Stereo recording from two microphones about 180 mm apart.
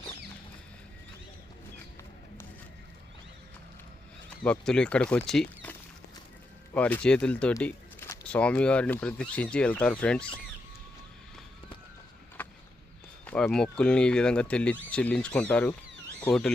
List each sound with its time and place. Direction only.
4.4 s speech: 5° left (ahead or behind)
6.7 s speech: 10° left (ahead or behind)
12.4 s a sound: 10° left (ahead or behind)
13.2 s speech: 5° left (ahead or behind)